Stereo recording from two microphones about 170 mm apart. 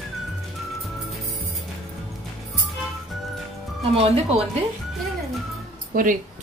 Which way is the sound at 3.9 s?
35° right (ahead or behind).